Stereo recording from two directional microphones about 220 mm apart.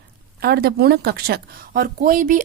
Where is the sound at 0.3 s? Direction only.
45° right (ahead or behind).